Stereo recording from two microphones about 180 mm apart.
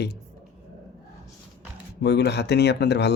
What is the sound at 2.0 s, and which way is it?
Speech, 70° left (ahead or behind).